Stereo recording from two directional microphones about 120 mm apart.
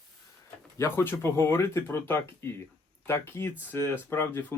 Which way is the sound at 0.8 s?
20° left (ahead or behind).